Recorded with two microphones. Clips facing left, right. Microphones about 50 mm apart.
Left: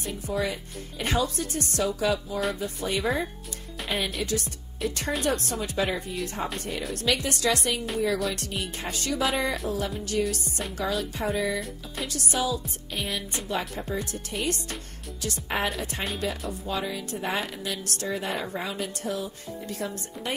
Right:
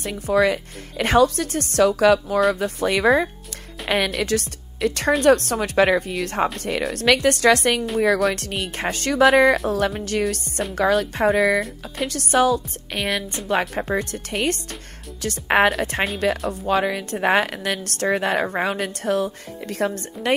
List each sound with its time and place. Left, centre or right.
0.0 s speech: right
3.8 s a woman's voice: right
5.2 s speech: right
7.2 s a woman's voice: right
8.0 s speech: right
8.4 s a woman's voice: right
8.9 s a woman's voice: right
9.2 s speech: right
9.7 s a woman's voice: right
10.7 s a woman's voice: right
12.1 s a woman's voice: right
15.4 s a woman's voice: right